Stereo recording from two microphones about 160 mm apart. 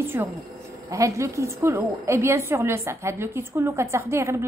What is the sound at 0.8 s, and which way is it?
A woman's voice, 20° right (ahead or behind).